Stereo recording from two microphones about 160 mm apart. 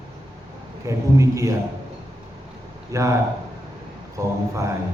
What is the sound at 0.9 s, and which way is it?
Speech, 20° right (ahead or behind).